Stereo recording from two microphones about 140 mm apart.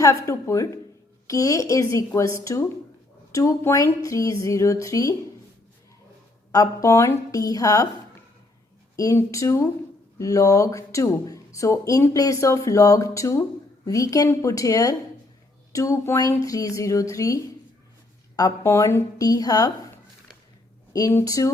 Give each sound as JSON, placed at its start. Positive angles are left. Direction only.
{"t": 0.0, "sound": "speech", "side_deg": 20}
{"t": 6.5, "sound": "speech", "side_deg": 25}
{"t": 9.0, "sound": "speech", "side_deg": 25}
{"t": 21.1, "sound": "speech", "side_deg": 20}